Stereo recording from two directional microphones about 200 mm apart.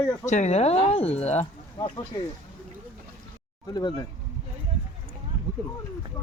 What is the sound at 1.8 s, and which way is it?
Speech, 20° left (ahead or behind).